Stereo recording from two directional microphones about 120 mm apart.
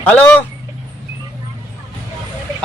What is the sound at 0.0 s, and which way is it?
Speech, 10° left (ahead or behind).